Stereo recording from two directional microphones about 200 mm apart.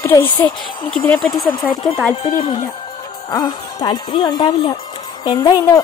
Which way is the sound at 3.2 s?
20° left (ahead or behind).